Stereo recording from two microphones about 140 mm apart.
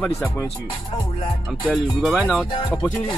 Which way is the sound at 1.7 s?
Centre (ahead or behind).